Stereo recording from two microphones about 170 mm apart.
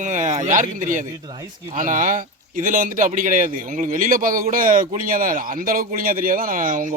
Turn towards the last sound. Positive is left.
turn(degrees=-50)  # may be behind; listen again after turning